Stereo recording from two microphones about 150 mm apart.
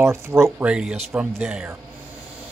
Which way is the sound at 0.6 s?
5° right (ahead or behind).